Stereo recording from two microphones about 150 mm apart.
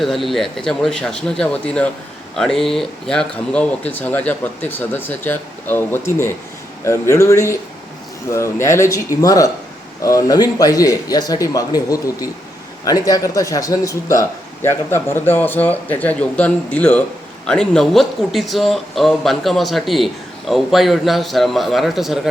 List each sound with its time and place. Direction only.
0.0 s a man's voice: centre (ahead or behind)